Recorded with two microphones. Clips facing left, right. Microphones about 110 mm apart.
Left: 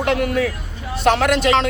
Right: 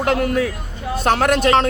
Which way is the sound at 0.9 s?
40° right (ahead or behind).